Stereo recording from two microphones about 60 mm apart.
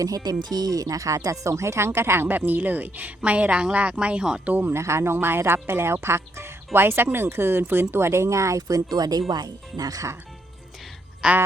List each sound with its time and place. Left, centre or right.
0.0 s speech: right
2.2 s a woman's voice: right
4.4 s speech: right
4.7 s speech: right
11.2 s quack: centre